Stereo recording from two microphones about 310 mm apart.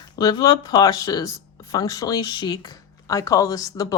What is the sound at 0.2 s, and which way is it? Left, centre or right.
Speech, centre.